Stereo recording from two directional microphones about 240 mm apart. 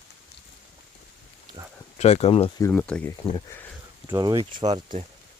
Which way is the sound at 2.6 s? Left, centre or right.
Centre.